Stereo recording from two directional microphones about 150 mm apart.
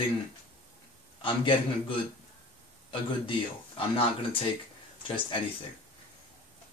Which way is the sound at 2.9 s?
35° left (ahead or behind).